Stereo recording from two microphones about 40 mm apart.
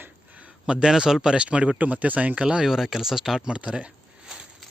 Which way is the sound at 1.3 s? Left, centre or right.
Right.